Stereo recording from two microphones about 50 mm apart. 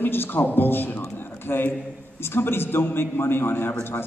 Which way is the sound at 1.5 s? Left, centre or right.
Left.